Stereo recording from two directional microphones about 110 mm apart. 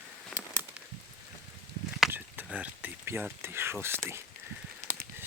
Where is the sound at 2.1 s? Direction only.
15° right (ahead or behind).